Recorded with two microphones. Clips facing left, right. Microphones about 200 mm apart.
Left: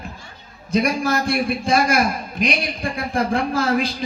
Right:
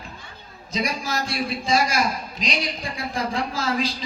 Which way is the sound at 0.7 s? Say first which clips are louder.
Left 7 dB; 55° left (ahead or behind).